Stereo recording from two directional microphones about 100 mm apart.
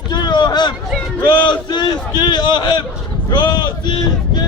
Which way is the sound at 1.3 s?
50° left (ahead or behind).